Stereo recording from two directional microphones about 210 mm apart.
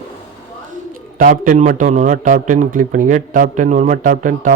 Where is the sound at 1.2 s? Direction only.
40° right (ahead or behind).